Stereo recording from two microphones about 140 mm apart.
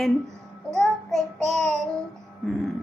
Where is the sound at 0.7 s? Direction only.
5° left (ahead or behind).